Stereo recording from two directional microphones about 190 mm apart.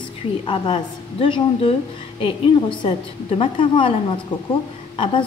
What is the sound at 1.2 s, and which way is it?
A woman's voice, 30° left (ahead or behind).